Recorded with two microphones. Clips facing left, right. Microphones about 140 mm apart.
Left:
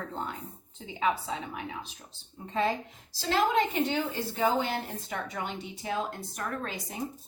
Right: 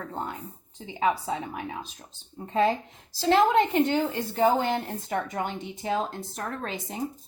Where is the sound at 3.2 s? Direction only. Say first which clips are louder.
Right 6 dB; 50° right (ahead or behind).